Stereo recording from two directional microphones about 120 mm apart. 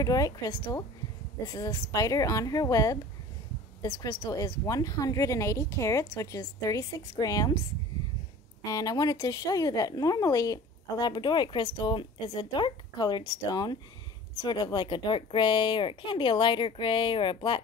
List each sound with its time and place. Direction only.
0.0 s a woman's voice: 30° left (ahead or behind)
8.6 s a woman's voice: 30° left (ahead or behind)